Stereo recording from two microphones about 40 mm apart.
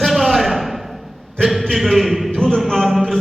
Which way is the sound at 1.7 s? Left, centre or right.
Centre.